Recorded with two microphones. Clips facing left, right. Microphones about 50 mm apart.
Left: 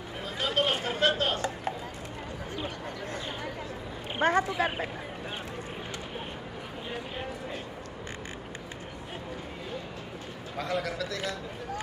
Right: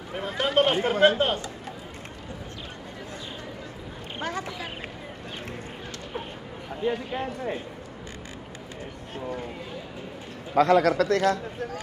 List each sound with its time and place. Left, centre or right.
0.1 s a sound: right
0.5 s speech: right
4.2 s speech: left
10.5 s a man's voice: right